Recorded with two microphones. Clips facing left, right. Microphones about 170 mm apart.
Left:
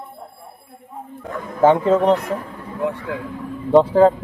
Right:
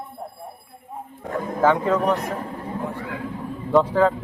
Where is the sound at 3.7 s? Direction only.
30° left (ahead or behind).